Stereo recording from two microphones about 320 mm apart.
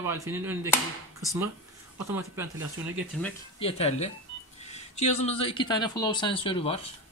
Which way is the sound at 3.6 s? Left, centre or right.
Centre.